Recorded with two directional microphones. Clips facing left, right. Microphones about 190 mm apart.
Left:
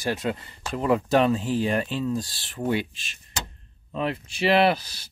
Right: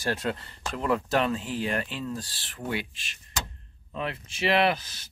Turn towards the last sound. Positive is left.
turn(degrees=35)  # may be behind; listen again after turning